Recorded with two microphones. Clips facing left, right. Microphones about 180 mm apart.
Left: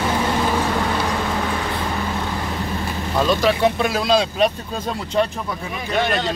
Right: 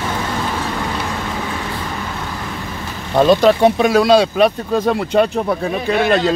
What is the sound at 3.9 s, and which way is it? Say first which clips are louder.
Speech: right 7 dB; 60° right (ahead or behind).